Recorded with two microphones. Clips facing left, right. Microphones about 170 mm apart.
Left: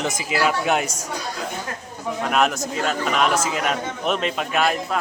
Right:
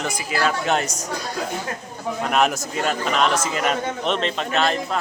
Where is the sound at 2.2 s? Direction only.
Centre (ahead or behind).